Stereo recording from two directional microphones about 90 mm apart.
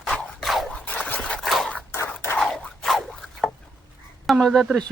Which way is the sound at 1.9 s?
30° left (ahead or behind).